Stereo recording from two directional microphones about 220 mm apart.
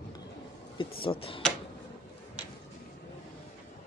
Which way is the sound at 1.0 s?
25° left (ahead or behind).